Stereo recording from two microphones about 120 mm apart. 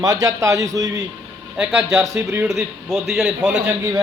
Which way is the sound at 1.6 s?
10° right (ahead or behind).